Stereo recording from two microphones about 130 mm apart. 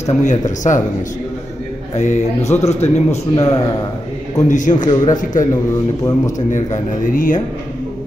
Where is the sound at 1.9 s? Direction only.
65° left (ahead or behind).